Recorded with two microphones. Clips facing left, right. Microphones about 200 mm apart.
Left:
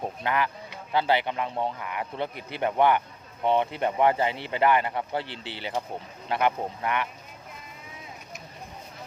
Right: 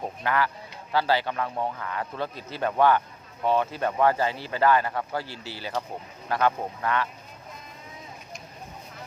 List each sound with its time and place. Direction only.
0.2 s speech: 20° left (ahead or behind)